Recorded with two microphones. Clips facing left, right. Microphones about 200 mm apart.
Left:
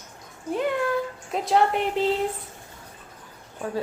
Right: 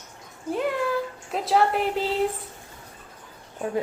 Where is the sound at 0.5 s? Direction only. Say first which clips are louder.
Left 1 dB; centre (ahead or behind).